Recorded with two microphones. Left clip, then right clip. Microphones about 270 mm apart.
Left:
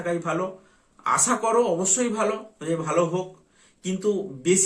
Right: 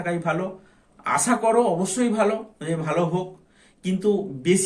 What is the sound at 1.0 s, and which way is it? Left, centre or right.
Speech, centre.